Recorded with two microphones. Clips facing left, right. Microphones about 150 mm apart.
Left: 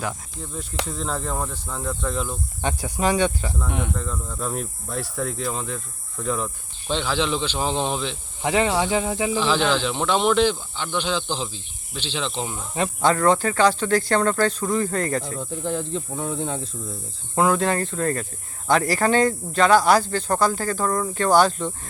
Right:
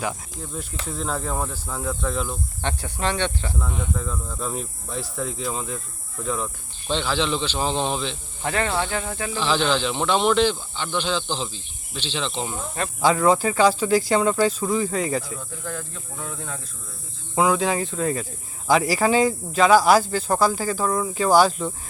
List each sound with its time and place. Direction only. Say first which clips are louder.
0.0 s cricket: right 1 dB; centre (ahead or behind)
0.9 s speech: right 3 dB; centre (ahead or behind)
2.6 s speech: left 4 dB; 10° left (ahead or behind)
3.7 s speech: left 3 dB; 75° left (ahead or behind)
3.9 s speech: even; 5° right (ahead or behind); by 12.9 s 15° left (ahead or behind)
13.0 s speech: right 1 dB; 5° right (ahead or behind)
15.4 s speech: left 7 dB; 25° left (ahead or behind)
17.3 s speech: even; centre (ahead or behind)